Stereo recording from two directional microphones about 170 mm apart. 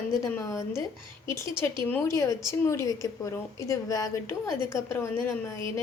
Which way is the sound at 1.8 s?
15° left (ahead or behind).